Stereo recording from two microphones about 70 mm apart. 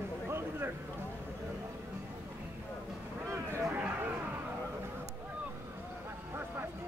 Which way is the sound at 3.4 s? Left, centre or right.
Right.